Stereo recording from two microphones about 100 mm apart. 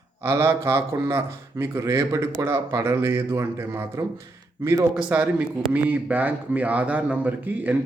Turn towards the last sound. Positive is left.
turn(degrees=-20)  # may be behind; listen again after turning